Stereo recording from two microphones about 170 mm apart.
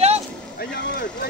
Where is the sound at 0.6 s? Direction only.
70° left (ahead or behind).